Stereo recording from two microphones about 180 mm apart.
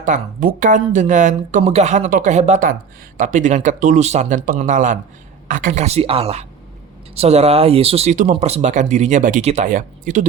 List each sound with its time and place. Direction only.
0.0 s speech: 45° right (ahead or behind)